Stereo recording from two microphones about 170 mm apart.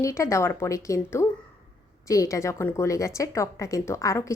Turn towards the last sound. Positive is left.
turn(degrees=20)  # may be behind; listen again after turning